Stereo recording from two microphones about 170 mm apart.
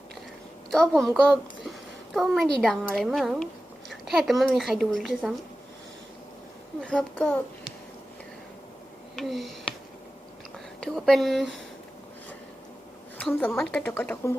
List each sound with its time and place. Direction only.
0.7 s a woman's voice: 5° left (ahead or behind)
6.8 s a woman's voice: 5° left (ahead or behind)
9.1 s a sound: centre (ahead or behind)
10.8 s a woman's voice: 5° left (ahead or behind)
13.1 s a woman's voice: 5° left (ahead or behind)